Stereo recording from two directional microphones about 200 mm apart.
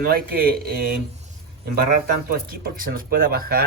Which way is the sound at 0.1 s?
50° right (ahead or behind).